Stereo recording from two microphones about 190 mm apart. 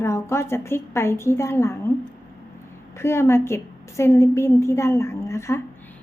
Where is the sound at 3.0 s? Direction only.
15° left (ahead or behind).